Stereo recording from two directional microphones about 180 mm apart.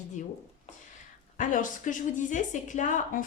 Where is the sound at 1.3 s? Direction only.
45° left (ahead or behind).